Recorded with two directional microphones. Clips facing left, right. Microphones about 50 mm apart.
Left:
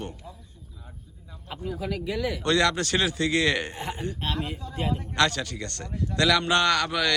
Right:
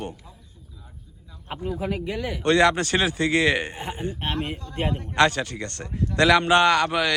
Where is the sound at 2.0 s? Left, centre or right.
Centre.